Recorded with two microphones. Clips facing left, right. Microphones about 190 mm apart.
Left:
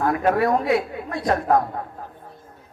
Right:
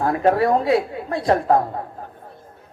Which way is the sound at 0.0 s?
30° right (ahead or behind).